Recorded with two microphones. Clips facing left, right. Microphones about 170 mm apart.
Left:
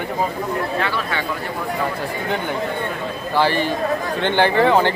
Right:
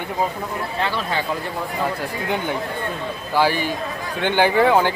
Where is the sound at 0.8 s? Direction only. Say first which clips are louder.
Even; 35° right (ahead or behind).